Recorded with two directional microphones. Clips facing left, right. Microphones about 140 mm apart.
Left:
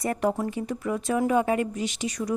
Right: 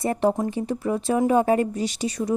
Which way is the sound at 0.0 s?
30° right (ahead or behind).